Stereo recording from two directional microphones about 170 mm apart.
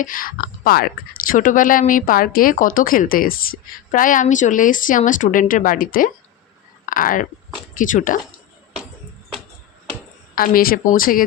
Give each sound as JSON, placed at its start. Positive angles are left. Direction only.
{"t": 0.0, "sound": "speech", "side_deg": 55}
{"t": 10.3, "sound": "speech", "side_deg": 60}